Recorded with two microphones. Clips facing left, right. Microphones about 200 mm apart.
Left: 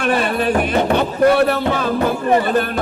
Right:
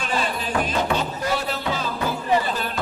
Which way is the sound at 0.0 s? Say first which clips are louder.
Left 9 dB; 65° left (ahead or behind).